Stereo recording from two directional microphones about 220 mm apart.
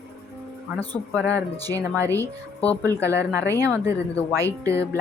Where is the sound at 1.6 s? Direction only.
15° right (ahead or behind).